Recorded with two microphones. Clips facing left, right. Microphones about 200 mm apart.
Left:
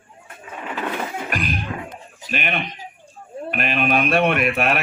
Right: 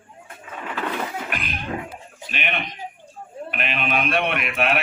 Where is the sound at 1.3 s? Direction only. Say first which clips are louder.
Left 6 dB; 40° left (ahead or behind).